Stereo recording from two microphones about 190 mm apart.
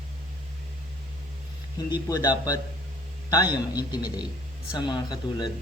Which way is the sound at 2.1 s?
20° left (ahead or behind).